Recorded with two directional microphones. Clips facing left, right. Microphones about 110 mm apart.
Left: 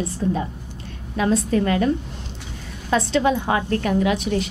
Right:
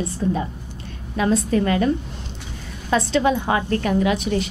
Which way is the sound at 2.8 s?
15° right (ahead or behind).